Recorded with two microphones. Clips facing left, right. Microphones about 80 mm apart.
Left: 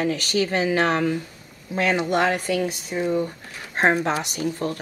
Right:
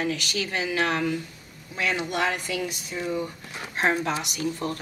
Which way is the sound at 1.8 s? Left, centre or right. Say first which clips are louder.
Left 6 dB; left.